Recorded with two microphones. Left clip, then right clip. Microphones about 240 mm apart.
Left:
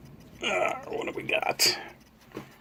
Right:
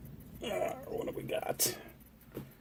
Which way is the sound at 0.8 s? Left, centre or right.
Centre.